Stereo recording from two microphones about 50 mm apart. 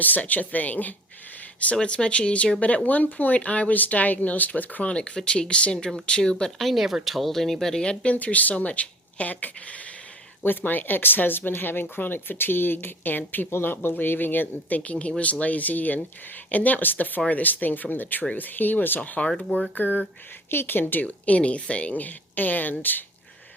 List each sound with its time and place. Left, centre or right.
0.0 s speech: left
1.7 s speech: centre; by 4.9 s left
4.9 s speech: left
6.4 s speech: centre
8.0 s speech: left
10.4 s speech: left
14.8 s speech: left
18.9 s speech: left
19.7 s speech: left
20.5 s speech: left
21.0 s speech: left